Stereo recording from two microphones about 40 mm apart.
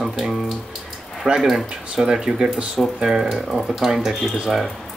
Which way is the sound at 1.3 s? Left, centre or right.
Centre.